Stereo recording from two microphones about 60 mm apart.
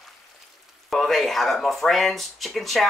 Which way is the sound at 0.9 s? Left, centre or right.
Centre.